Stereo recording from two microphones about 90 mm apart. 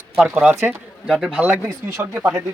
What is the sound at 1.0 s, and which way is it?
A man's voice, 10° right (ahead or behind).